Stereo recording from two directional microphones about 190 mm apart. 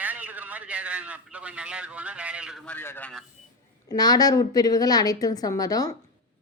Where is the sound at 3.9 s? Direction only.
20° left (ahead or behind).